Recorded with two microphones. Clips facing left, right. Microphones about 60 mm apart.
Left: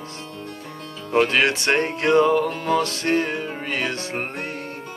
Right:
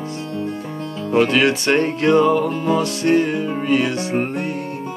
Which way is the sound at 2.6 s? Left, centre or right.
Left.